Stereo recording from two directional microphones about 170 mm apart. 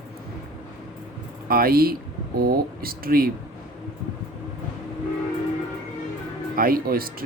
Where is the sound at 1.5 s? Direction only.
60° right (ahead or behind).